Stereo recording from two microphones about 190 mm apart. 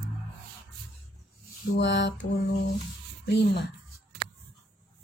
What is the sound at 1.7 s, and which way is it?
Chicken, 70° left (ahead or behind).